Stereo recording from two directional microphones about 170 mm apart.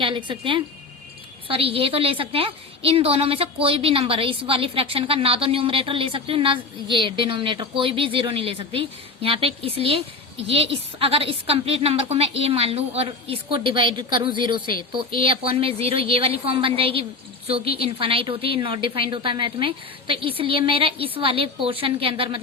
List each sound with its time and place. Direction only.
0.0 s a woman's voice: 30° right (ahead or behind)